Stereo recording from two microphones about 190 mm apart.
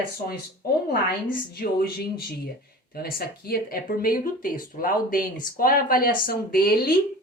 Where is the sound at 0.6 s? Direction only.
50° left (ahead or behind).